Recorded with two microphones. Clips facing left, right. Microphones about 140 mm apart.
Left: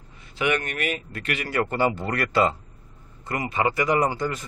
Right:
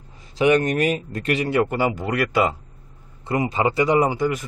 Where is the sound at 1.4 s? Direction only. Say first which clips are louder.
Right 2 dB; 20° right (ahead or behind).